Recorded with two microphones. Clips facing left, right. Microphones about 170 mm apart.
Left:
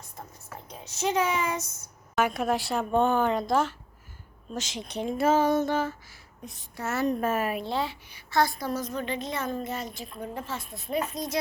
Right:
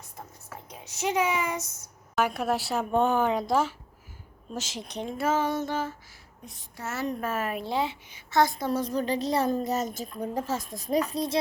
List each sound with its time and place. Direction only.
0.9 s speech: 10° right (ahead or behind)
2.1 s a woman's voice: centre (ahead or behind)
5.1 s music: 30° left (ahead or behind)
5.5 s a sound: 55° left (ahead or behind)
7.2 s music: 20° left (ahead or behind)
7.6 s a woman's voice: 15° right (ahead or behind)